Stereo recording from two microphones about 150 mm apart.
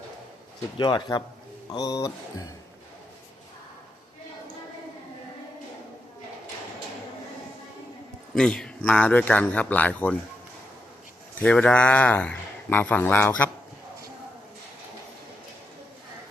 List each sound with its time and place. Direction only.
0.8 s speech: 30° left (ahead or behind)
8.4 s a man's voice: 5° left (ahead or behind)
11.3 s a man's voice: 5° left (ahead or behind)